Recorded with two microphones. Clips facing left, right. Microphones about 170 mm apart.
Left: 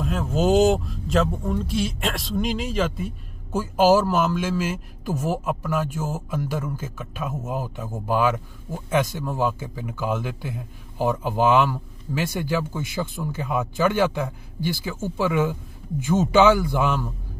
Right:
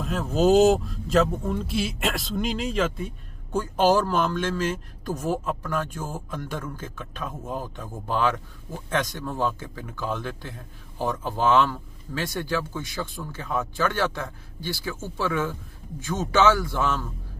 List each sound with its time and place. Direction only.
0.0 s a man's voice: centre (ahead or behind)